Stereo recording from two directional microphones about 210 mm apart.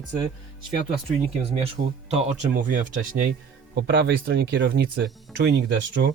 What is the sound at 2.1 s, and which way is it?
Speech, 30° right (ahead or behind).